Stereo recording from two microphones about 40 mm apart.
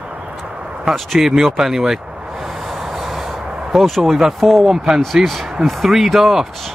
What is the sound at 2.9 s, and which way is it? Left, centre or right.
Train, centre.